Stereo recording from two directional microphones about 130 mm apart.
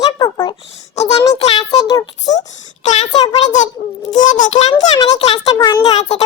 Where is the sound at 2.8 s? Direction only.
60° left (ahead or behind).